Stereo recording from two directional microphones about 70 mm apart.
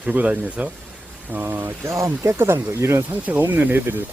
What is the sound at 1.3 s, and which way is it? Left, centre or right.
Speech, right.